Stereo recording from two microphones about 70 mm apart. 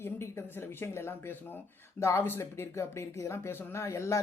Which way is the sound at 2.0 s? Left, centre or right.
Left.